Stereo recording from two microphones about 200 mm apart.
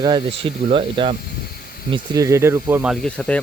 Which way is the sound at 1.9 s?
15° right (ahead or behind).